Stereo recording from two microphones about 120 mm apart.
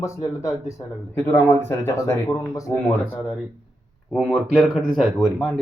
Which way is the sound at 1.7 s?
20° left (ahead or behind).